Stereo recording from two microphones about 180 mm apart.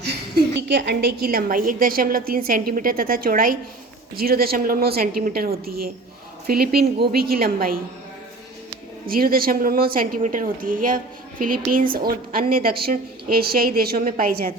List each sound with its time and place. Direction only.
0.0 s a woman's voice: 65° right (ahead or behind)
9.0 s a woman's voice: 55° right (ahead or behind)